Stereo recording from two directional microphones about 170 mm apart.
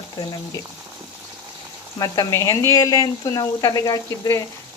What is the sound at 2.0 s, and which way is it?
Speech, 20° left (ahead or behind).